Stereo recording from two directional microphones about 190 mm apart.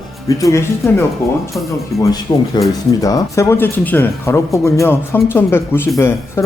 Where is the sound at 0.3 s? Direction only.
15° left (ahead or behind).